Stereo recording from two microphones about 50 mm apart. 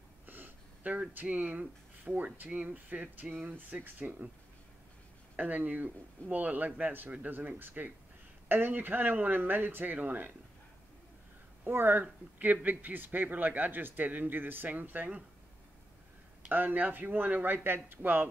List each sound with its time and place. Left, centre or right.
0.3 s a sound: right
1.2 s speech: right
5.3 s speech: right
11.6 s speech: right
16.4 s speech: right